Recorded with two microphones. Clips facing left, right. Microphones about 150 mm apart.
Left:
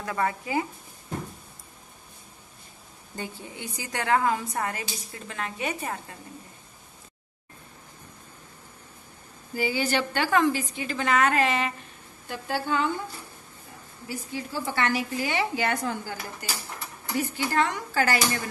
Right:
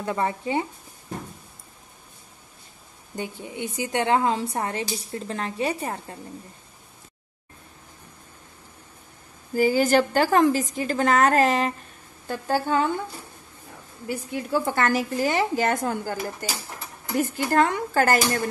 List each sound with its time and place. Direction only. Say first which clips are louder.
0.0 s a woman's voice: right 3 dB; 25° right (ahead or behind)
3.2 s a woman's voice: right 5 dB; 20° right (ahead or behind)
9.6 s a woman's voice: right 7 dB; 45° right (ahead or behind)
14.0 s a woman's voice: right 5 dB; 55° right (ahead or behind)